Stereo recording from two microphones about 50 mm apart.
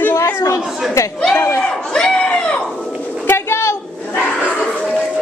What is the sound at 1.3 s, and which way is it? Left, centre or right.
Speech, left.